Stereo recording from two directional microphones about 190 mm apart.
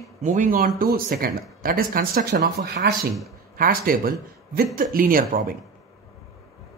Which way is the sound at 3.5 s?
50° right (ahead or behind).